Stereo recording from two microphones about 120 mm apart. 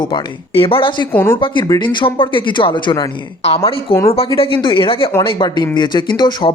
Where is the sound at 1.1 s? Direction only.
20° left (ahead or behind).